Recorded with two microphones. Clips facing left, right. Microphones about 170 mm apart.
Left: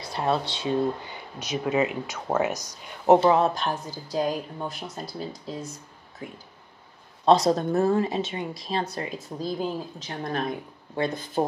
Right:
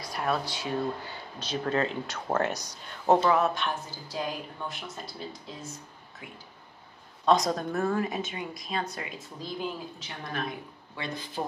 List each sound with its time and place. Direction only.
0.0 s speech: 25° left (ahead or behind); by 2.5 s 5° left (ahead or behind)
2.5 s speech: 10° right (ahead or behind)
3.1 s a woman's voice: 25° left (ahead or behind); by 11.4 s 50° left (ahead or behind)